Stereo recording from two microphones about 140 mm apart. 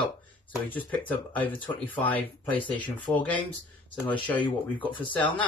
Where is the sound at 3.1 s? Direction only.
10° left (ahead or behind).